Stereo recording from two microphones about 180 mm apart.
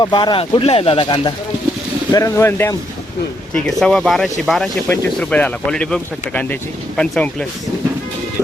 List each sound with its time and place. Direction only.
0.0 s speech: 25° left (ahead or behind)
2.1 s speech: 15° left (ahead or behind)
3.5 s speech: 5° left (ahead or behind)